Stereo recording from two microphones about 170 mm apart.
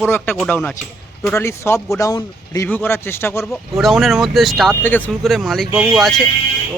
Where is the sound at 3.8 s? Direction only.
Centre (ahead or behind).